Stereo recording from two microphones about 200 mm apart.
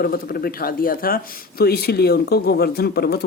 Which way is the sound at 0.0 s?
50° left (ahead or behind).